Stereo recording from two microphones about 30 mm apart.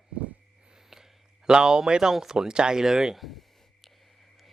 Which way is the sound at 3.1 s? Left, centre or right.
Centre.